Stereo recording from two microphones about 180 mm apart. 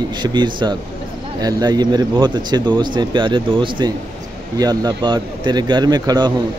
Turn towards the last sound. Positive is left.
turn(degrees=-25)  # may be behind; listen again after turning